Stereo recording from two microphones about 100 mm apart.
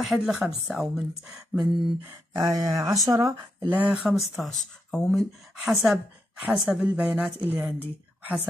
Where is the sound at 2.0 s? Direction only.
25° right (ahead or behind).